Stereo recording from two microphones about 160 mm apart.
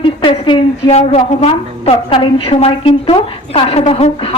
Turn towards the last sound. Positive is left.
turn(degrees=35)  # may be behind; listen again after turning